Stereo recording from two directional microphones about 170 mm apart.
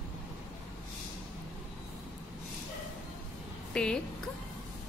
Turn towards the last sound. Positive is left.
turn(degrees=5)  # may be behind; listen again after turning